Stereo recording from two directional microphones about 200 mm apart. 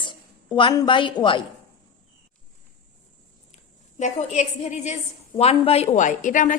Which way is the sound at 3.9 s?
35° left (ahead or behind).